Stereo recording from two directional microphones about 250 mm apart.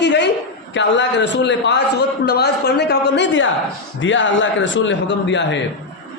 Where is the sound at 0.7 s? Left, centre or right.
Left.